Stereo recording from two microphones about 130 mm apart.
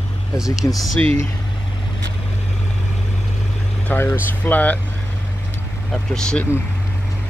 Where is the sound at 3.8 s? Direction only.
15° left (ahead or behind).